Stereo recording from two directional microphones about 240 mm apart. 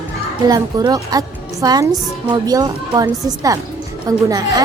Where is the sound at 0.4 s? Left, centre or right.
Centre.